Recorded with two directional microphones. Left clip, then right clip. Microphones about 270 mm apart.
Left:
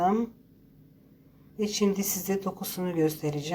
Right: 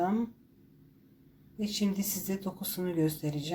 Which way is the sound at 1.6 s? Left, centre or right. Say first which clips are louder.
Left 7 dB; centre.